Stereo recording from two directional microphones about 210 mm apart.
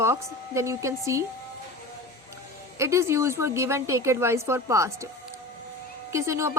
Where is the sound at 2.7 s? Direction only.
15° right (ahead or behind).